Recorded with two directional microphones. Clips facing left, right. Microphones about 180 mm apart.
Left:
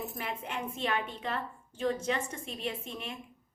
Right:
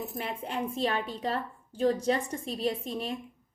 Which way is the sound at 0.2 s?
30° right (ahead or behind).